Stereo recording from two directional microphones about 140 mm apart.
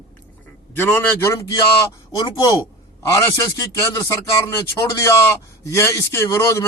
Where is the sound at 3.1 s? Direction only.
25° left (ahead or behind).